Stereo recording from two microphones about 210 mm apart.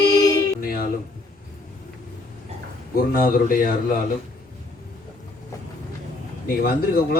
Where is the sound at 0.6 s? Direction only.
45° left (ahead or behind).